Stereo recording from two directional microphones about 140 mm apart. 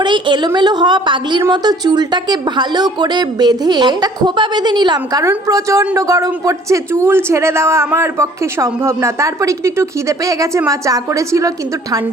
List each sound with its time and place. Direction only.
0.0 s a woman's voice: 35° right (ahead or behind)